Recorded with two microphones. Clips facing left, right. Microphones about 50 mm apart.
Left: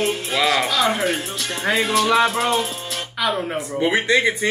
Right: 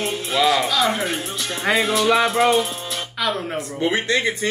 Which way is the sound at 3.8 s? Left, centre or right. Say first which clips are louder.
Left 3 dB; centre.